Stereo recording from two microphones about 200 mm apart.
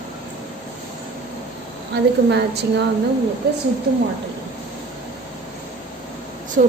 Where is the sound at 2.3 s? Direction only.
60° right (ahead or behind).